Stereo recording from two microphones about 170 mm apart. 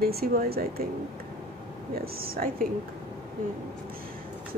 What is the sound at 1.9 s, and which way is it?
Speech, 60° right (ahead or behind).